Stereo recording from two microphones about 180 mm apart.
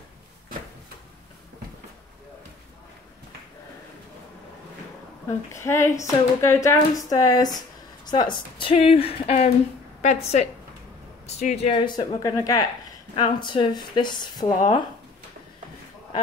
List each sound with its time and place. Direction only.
5.5 s speech: 15° left (ahead or behind)